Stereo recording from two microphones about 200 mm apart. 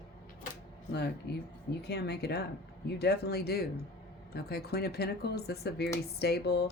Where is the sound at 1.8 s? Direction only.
55° left (ahead or behind).